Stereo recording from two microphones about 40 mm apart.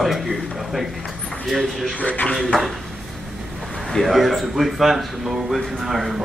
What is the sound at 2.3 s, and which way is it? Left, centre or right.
Speech, centre.